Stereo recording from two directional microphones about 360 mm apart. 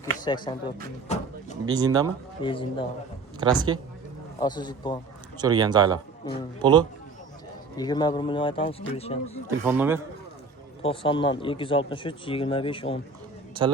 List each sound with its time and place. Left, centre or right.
0.3 s speech: centre
1.0 s a sound: centre
1.6 s speech: centre
2.4 s speech: centre
3.4 s speech: centre
4.4 s speech: centre
5.4 s speech: centre
7.8 s speech: centre
9.6 s a man's voice: centre
10.8 s speech: centre